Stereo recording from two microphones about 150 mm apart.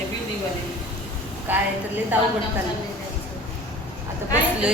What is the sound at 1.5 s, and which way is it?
Speech, 15° right (ahead or behind).